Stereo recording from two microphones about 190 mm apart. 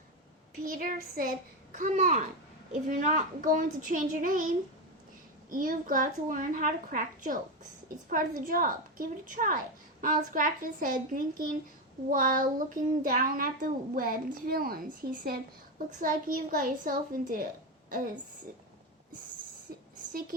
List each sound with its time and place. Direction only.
0.6 s a child's voice: 45° right (ahead or behind)
8.4 s a child's voice: 45° right (ahead or behind)